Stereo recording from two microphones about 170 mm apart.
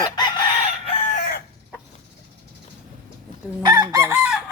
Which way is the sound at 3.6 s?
25° right (ahead or behind).